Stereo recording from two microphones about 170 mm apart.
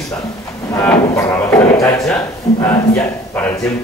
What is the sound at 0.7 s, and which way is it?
Speech, 15° left (ahead or behind).